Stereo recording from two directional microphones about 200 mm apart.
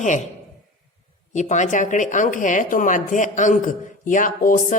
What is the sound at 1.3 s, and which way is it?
Speech, 35° left (ahead or behind).